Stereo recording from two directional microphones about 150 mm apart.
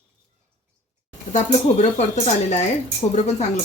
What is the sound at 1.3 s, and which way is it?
Speech, 50° left (ahead or behind).